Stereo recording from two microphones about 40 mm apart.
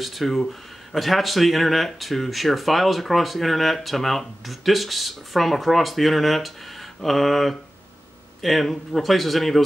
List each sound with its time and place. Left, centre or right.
0.0 s speech: centre